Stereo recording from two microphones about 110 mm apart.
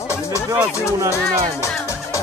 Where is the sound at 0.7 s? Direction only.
25° left (ahead or behind).